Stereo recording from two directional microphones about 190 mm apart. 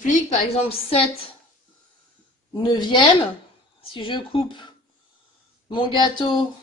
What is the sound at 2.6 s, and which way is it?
Speech, 25° left (ahead or behind).